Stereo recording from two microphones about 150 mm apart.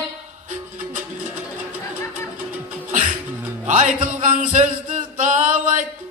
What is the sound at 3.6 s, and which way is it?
Music, 55° right (ahead or behind).